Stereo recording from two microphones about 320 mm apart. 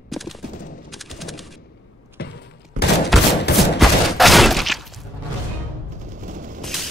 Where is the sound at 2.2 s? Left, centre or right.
Left.